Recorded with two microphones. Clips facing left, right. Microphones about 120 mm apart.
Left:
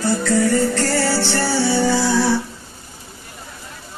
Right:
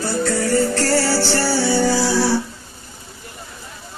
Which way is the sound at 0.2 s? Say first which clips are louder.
Right 1 dB; 35° right (ahead or behind).